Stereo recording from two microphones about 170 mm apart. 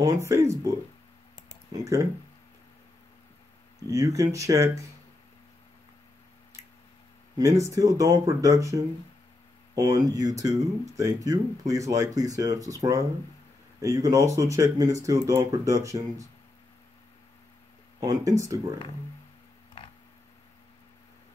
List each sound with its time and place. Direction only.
0.0 s speech: 20° right (ahead or behind)
3.9 s speech: 20° right (ahead or behind)
7.3 s speech: 20° right (ahead or behind)
18.0 s speech: 20° right (ahead or behind)